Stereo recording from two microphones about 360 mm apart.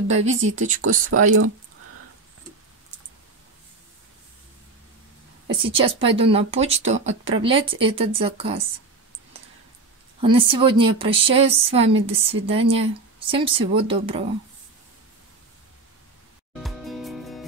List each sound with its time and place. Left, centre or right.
0.2 s speech: centre
0.8 s speech: right
5.5 s speech: centre
10.2 s speech: centre
16.6 s music: centre